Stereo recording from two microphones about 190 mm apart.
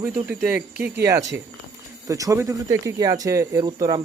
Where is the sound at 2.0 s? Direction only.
15° right (ahead or behind).